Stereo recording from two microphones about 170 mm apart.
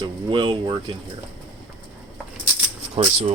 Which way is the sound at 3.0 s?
35° right (ahead or behind).